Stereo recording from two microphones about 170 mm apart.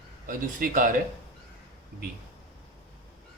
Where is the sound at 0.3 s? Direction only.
50° right (ahead or behind).